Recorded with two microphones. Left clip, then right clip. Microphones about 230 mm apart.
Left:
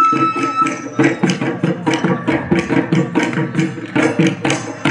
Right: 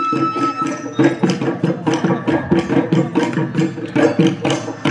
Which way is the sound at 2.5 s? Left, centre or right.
Left.